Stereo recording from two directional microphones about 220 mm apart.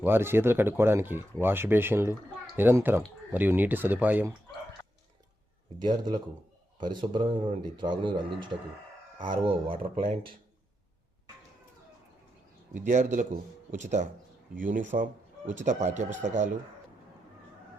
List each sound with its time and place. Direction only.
0.0 s speech: 10° right (ahead or behind)
5.8 s speech: 20° right (ahead or behind)
10.0 s speech: 40° right (ahead or behind)
12.7 s speech: 35° right (ahead or behind)